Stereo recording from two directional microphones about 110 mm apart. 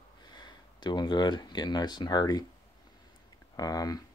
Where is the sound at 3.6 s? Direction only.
35° left (ahead or behind).